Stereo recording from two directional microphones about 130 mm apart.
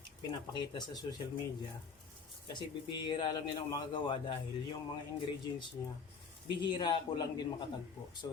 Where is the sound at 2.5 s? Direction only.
35° left (ahead or behind).